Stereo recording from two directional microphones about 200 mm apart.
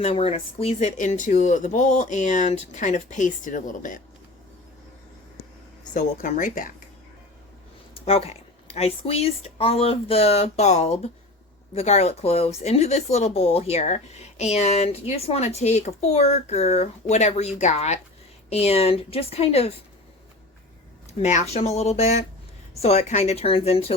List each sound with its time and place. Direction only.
0.0 s speech: 30° left (ahead or behind)
5.9 s speech: 40° left (ahead or behind)
7.9 s speech: 30° left (ahead or behind)
21.1 s speech: 35° left (ahead or behind)